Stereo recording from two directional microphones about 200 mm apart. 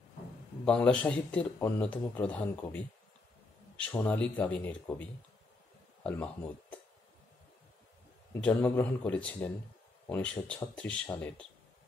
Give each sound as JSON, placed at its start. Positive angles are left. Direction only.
{"t": 0.7, "sound": "speech", "side_deg": 5}
{"t": 8.4, "sound": "speech", "side_deg": 10}